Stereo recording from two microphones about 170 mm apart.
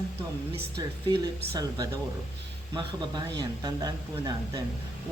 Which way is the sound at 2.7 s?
25° right (ahead or behind).